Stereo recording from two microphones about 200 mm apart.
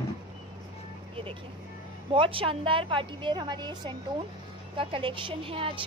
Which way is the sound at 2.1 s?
25° right (ahead or behind).